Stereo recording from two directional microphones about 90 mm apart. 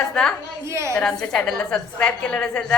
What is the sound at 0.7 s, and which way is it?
Speech, 30° right (ahead or behind).